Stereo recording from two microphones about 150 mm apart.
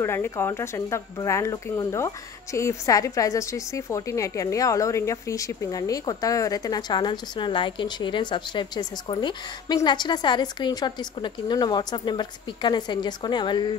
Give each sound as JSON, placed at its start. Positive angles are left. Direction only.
{"t": 0.0, "sound": "speech", "side_deg": 15}